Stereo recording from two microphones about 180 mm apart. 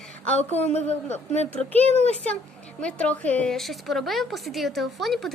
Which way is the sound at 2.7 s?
5° left (ahead or behind).